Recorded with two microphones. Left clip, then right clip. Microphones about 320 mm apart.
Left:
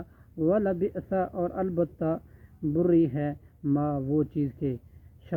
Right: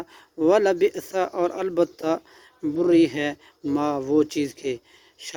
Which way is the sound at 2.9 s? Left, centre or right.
Right.